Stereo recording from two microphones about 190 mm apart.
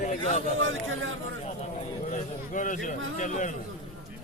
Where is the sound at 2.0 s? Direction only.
40° left (ahead or behind).